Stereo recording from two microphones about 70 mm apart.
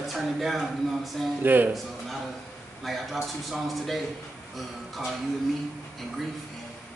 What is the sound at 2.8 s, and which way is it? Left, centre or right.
Speech, centre.